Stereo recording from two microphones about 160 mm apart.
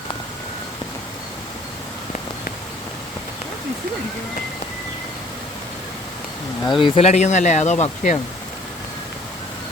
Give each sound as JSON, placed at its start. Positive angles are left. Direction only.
{"t": 6.7, "sound": "speech", "side_deg": 30}